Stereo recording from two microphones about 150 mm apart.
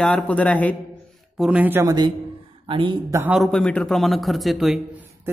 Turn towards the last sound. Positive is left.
turn(degrees=0)  # may be behind; listen again after turning